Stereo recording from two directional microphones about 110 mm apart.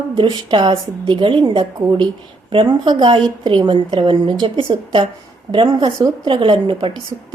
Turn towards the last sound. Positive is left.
turn(degrees=-50)  # may be behind; listen again after turning